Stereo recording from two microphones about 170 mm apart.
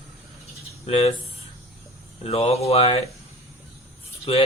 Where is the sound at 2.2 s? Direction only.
35° left (ahead or behind).